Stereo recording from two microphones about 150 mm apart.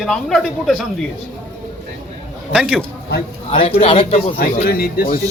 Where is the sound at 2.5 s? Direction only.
5° right (ahead or behind).